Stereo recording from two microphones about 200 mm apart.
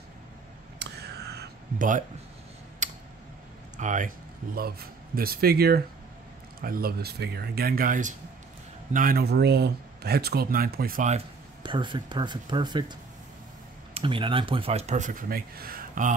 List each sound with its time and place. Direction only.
0.7 s a sound: 55° right (ahead or behind)
2.8 s tick: 35° right (ahead or behind)
3.7 s speech: 40° right (ahead or behind)
4.6 s speech: 50° right (ahead or behind)
11.6 s speech: 25° right (ahead or behind)
13.9 s speech: 25° right (ahead or behind); by 16.1 s 45° right (ahead or behind)